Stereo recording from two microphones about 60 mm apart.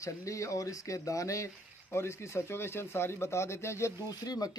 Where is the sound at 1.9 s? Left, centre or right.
Left.